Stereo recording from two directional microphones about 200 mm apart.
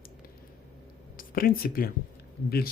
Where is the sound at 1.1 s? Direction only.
45° left (ahead or behind).